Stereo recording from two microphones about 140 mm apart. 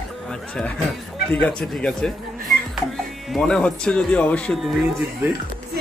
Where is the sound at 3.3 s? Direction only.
5° left (ahead or behind).